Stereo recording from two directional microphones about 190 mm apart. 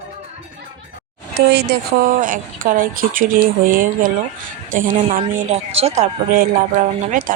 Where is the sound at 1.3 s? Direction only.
55° right (ahead or behind).